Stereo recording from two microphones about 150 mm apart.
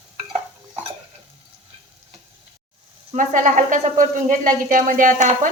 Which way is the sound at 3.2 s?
60° right (ahead or behind).